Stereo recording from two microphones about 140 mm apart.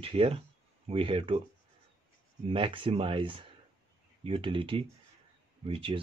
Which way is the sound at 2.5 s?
40° right (ahead or behind).